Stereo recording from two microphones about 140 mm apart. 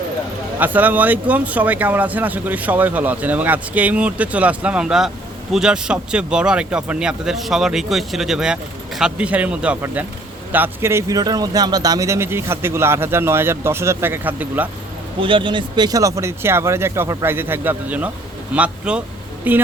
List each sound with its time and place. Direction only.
0.6 s speech: 10° right (ahead or behind)
15.2 s speech: 35° right (ahead or behind); by 19.6 s 10° right (ahead or behind)